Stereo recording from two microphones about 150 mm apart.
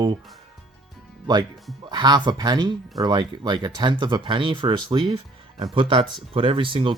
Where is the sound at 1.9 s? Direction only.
30° right (ahead or behind).